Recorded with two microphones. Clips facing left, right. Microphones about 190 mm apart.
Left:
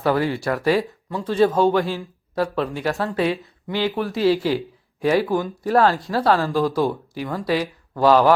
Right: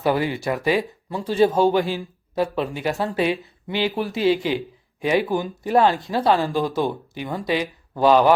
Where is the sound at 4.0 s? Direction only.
Centre (ahead or behind).